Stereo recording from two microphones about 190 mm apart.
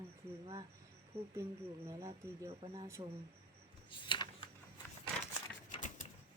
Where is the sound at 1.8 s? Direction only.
15° right (ahead or behind).